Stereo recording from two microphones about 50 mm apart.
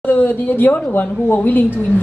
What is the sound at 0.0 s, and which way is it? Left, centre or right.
Speech, left.